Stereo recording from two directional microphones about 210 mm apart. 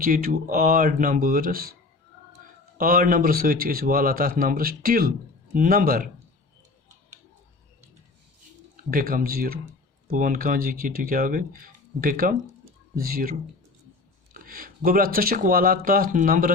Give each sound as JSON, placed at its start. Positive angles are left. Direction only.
{"t": 0.0, "sound": "speech", "side_deg": -45}
{"t": 2.7, "sound": "speech", "side_deg": -45}
{"t": 8.7, "sound": "speech", "side_deg": -45}
{"t": 14.3, "sound": "speech", "side_deg": -40}